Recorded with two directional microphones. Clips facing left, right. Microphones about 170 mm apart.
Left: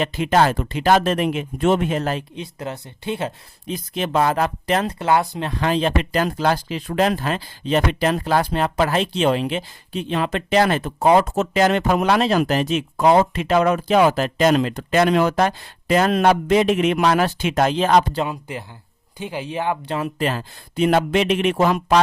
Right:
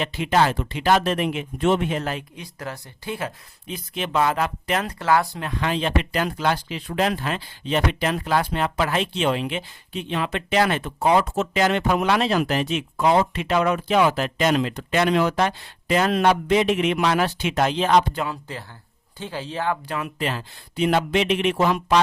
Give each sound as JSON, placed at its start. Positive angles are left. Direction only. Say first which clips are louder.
{"t": 0.0, "sound": "speech", "louder": "left 3 dB", "side_deg": 45}
{"t": 2.3, "sound": "speech", "louder": "left 4 dB", "side_deg": 20}
{"t": 3.7, "sound": "speech", "louder": "left 4 dB", "side_deg": 40}
{"t": 4.9, "sound": "speech", "louder": "left 2 dB", "side_deg": 20}
{"t": 5.5, "sound": "speech", "louder": "left 4 dB", "side_deg": 35}
{"t": 18.2, "sound": "speech", "louder": "left 4 dB", "side_deg": 20}
{"t": 20.0, "sound": "speech", "louder": "left 4 dB", "side_deg": 45}